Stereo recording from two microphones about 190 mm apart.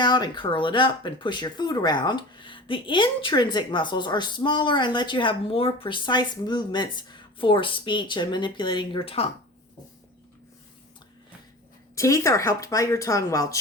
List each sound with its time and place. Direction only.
0.0 s speech: 25° left (ahead or behind)
11.9 s speech: 15° left (ahead or behind)